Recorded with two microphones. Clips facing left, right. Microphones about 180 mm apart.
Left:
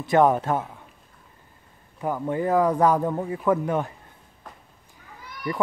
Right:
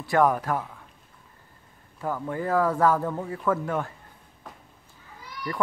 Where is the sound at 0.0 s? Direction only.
20° left (ahead or behind).